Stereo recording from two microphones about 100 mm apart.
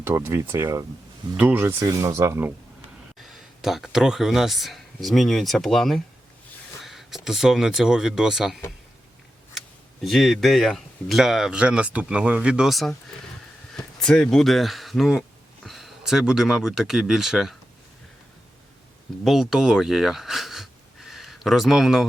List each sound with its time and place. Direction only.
0.0 s speech: 25° right (ahead or behind)
1.4 s speech: 20° right (ahead or behind)
1.8 s speech: 35° right (ahead or behind)
3.2 s speech: centre (ahead or behind)
9.6 s speech: centre (ahead or behind)
14.0 s speech: 5° left (ahead or behind)
19.2 s speech: centre (ahead or behind)